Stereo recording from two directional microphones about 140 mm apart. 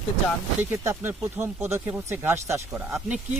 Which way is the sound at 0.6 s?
15° right (ahead or behind).